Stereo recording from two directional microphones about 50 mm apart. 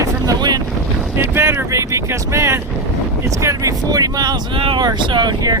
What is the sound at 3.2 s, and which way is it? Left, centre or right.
Speech, right.